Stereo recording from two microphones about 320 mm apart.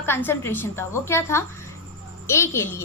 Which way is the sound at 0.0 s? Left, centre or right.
Centre.